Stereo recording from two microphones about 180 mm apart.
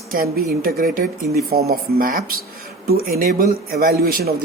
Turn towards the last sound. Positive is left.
turn(degrees=-60)  # may be behind; listen again after turning